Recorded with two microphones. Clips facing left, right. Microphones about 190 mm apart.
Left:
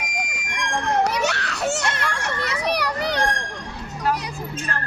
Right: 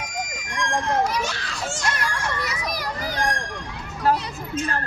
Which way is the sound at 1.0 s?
70° left (ahead or behind).